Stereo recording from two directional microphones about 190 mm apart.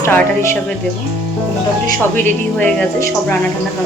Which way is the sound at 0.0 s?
15° left (ahead or behind).